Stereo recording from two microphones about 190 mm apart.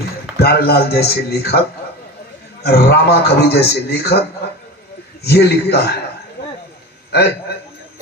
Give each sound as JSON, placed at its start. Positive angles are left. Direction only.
{"t": 0.4, "sound": "a man's voice", "side_deg": 55}
{"t": 2.6, "sound": "a man's voice", "side_deg": 60}
{"t": 5.2, "sound": "a man's voice", "side_deg": 60}
{"t": 7.1, "sound": "a man's voice", "side_deg": 60}